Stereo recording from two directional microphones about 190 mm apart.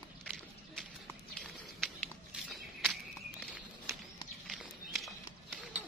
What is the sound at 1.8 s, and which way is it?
Walk, centre (ahead or behind).